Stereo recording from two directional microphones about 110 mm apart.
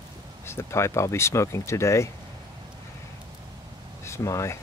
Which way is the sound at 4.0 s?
25° left (ahead or behind).